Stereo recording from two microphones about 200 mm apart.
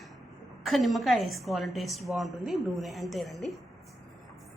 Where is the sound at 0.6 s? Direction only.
Centre (ahead or behind).